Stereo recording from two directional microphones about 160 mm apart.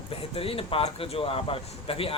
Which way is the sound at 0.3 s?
35° left (ahead or behind).